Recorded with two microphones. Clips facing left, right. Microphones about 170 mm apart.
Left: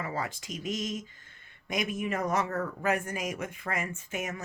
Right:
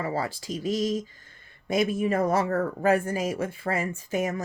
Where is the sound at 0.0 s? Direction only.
35° right (ahead or behind).